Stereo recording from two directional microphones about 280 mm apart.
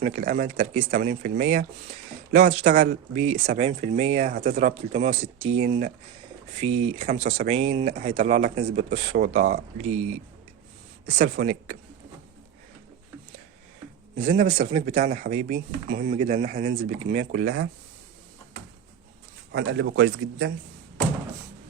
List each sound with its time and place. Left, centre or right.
0.0 s a man's voice: right
14.2 s speech: right
19.5 s a man's voice: right